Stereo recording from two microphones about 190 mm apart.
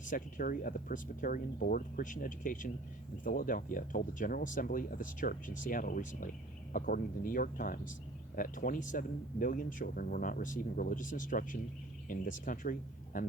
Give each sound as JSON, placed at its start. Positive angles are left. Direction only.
{"t": 0.0, "sound": "speech", "side_deg": 45}